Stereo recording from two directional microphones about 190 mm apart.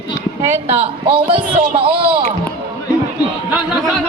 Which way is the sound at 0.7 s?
30° right (ahead or behind).